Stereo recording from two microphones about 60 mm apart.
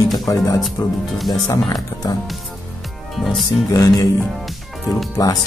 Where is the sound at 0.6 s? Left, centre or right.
Centre.